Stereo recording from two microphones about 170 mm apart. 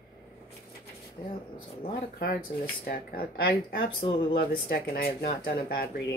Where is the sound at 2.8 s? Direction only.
60° left (ahead or behind).